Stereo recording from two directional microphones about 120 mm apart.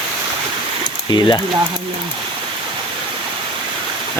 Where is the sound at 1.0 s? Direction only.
40° left (ahead or behind).